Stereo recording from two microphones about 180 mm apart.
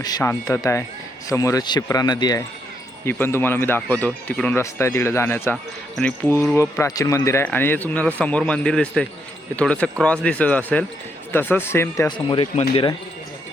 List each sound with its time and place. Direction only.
0.0 s speech: 20° left (ahead or behind)